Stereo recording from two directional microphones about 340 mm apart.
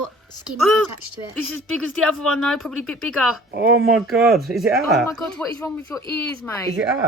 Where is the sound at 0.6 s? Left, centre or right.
Centre.